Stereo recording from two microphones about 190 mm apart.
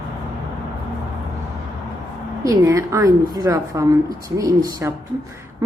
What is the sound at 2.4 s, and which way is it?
A woman's voice, 15° right (ahead or behind).